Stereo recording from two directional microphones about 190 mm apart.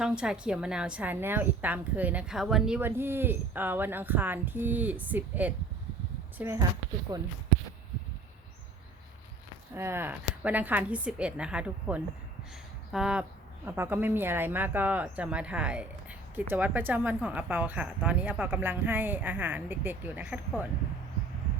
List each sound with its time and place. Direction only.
0.0 s speech: 5° right (ahead or behind); by 7.2 s 20° right (ahead or behind)
9.7 s speech: 15° right (ahead or behind)